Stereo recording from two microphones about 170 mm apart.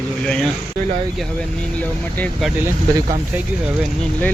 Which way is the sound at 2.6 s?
20° right (ahead or behind).